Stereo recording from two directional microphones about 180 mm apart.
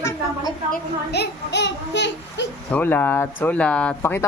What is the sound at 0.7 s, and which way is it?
A child's voice, 65° left (ahead or behind).